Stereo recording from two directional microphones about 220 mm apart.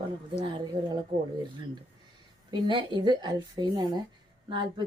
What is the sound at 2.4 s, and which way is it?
Speech, 20° right (ahead or behind).